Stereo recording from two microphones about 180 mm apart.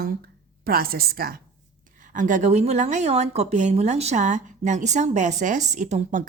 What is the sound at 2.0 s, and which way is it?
Speech, 45° right (ahead or behind).